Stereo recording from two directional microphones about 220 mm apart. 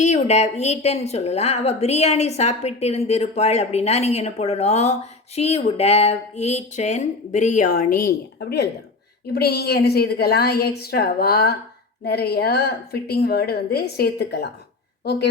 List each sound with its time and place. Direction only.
0.0 s a woman's voice: 30° left (ahead or behind); by 14.4 s 45° left (ahead or behind)